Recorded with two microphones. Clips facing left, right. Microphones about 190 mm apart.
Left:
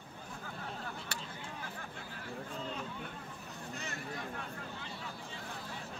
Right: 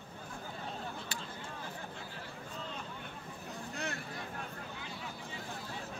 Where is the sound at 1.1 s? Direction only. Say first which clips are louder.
Even; 65° left (ahead or behind).